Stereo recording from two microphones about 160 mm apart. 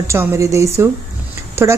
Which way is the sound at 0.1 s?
15° right (ahead or behind).